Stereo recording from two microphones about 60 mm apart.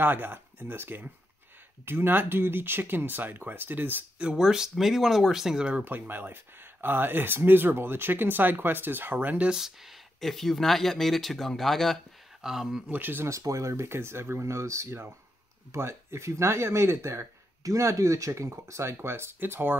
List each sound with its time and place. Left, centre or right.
0.0 s speech: right
4.2 s speech: centre
5.9 s speech: right
9.5 s speech: centre
12.4 s speech: centre
12.9 s speech: right
13.3 s speech: right
17.6 s speech: right
18.5 s speech: right